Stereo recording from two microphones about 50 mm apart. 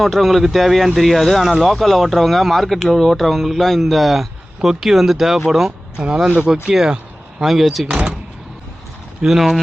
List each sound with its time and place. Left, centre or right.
0.0 s speech: centre
6.1 s speech: centre
7.4 s speech: centre
9.2 s speech: centre